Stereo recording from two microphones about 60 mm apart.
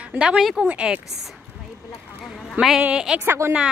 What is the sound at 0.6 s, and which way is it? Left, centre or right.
Speech, right.